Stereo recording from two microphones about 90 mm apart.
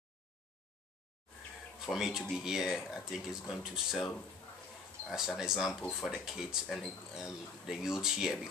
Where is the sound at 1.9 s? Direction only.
5° right (ahead or behind).